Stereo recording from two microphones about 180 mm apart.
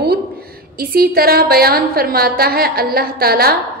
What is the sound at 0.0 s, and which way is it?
A woman's voice, 60° right (ahead or behind).